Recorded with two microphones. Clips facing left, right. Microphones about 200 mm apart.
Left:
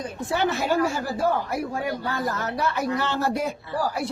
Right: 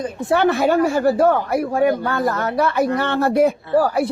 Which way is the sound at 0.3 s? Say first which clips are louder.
Right 8 dB; 60° right (ahead or behind).